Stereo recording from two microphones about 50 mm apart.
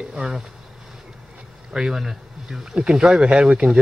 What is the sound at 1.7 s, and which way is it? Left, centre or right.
Speech, centre.